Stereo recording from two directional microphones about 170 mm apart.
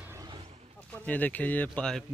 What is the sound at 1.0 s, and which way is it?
A man's voice, 10° left (ahead or behind).